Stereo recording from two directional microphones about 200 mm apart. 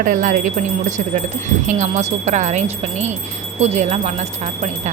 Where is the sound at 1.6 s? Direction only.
35° right (ahead or behind).